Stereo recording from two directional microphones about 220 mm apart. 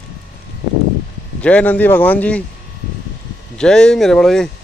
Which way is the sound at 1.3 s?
5° left (ahead or behind).